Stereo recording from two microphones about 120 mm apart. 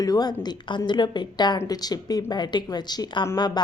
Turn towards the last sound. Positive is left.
turn(degrees=35)  # may be behind; listen again after turning